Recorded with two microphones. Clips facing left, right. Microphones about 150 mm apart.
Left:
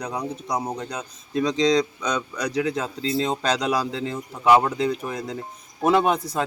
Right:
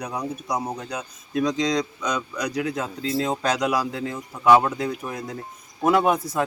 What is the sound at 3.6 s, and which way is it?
A man's voice, 25° left (ahead or behind).